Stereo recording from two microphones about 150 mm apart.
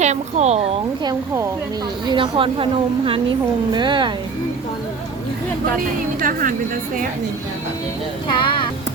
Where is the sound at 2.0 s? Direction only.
35° right (ahead or behind).